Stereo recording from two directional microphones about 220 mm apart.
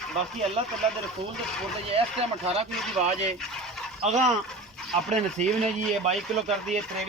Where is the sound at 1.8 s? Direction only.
25° right (ahead or behind).